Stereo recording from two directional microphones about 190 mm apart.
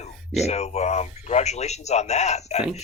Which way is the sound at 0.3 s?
35° left (ahead or behind).